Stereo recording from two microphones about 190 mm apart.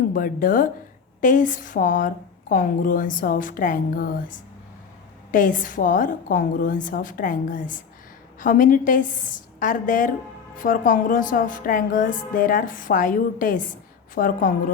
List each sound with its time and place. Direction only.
0.1 s a woman's voice: 45° left (ahead or behind)